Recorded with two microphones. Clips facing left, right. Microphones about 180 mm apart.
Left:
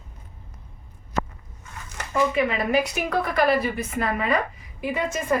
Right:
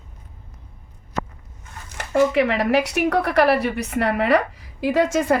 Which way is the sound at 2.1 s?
75° right (ahead or behind).